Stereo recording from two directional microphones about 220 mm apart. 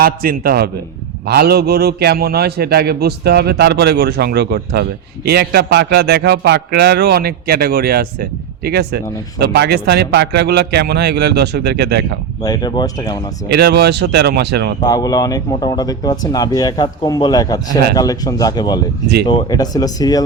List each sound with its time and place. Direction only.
0.0 s a man's voice: 40° right (ahead or behind)
12.4 s speech: 20° left (ahead or behind)
13.5 s a man's voice: 50° right (ahead or behind)
14.8 s speech: 15° left (ahead or behind)